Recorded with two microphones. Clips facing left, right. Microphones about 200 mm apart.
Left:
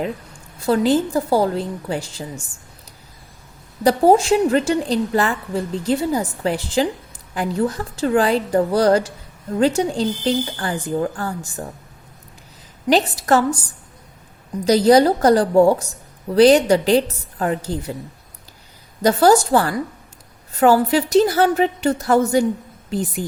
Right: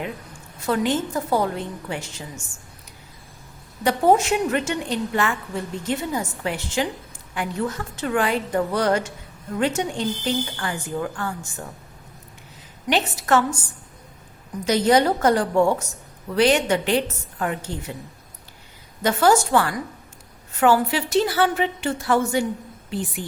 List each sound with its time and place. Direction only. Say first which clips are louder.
0.6 s a woman's voice: left 6 dB; 35° left (ahead or behind)
3.8 s a woman's voice: left 4 dB; 35° left (ahead or behind)
12.9 s a woman's voice: left 4 dB; 35° left (ahead or behind)
14.6 s a woman's voice: left 5 dB; 35° left (ahead or behind)
19.0 s a woman's voice: left 4 dB; 35° left (ahead or behind)